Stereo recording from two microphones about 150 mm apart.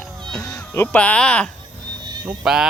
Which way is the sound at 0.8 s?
10° left (ahead or behind).